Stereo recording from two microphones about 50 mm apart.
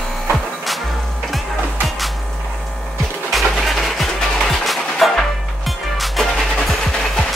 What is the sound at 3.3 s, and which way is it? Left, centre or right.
Music, centre.